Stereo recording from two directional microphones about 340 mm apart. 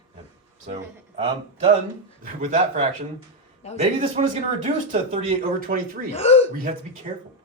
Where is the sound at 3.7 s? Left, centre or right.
Centre.